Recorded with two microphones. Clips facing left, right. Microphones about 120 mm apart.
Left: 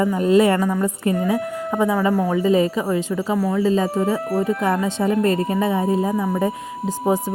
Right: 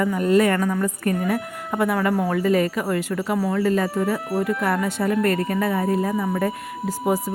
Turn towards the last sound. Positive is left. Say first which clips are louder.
# left 2 dB
turn(degrees=15)  # may be behind; listen again after turning